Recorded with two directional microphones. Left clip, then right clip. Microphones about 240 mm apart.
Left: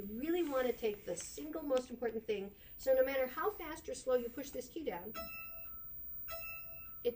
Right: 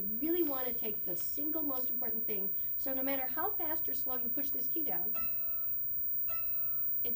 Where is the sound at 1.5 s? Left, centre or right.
Centre.